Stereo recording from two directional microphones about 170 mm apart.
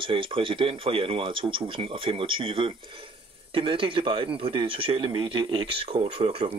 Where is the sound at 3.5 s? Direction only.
30° right (ahead or behind).